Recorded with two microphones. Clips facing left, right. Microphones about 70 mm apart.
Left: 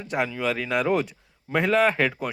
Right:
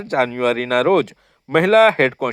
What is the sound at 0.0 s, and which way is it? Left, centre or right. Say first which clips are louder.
Speech: right 8 dB; right.